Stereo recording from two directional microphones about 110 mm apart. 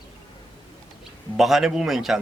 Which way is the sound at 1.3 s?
Centre (ahead or behind).